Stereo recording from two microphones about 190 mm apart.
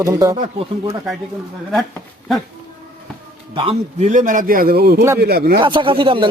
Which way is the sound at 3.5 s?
30° right (ahead or behind).